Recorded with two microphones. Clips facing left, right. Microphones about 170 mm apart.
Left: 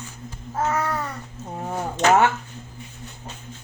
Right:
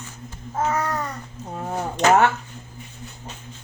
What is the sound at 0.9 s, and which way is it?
Babbling, 5° left (ahead or behind).